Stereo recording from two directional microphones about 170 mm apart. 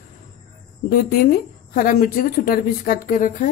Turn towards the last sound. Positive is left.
turn(degrees=50)  # may be behind; listen again after turning